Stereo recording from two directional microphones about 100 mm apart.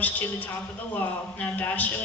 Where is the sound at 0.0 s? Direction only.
15° left (ahead or behind).